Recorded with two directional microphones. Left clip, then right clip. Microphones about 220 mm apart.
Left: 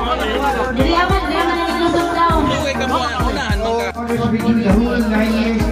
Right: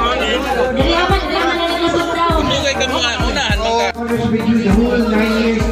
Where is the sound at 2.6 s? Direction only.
55° left (ahead or behind).